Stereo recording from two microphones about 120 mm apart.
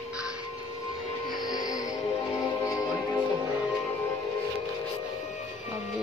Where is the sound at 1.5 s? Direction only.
30° left (ahead or behind).